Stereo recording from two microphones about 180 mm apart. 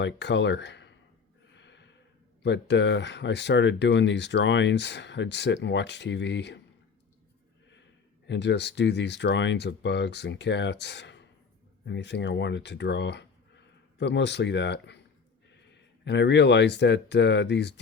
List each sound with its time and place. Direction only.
0.0 s speech: 75° left (ahead or behind)
1.5 s snort: 80° left
2.4 s speech: 75° left (ahead or behind)
8.3 s speech: 75° left (ahead or behind)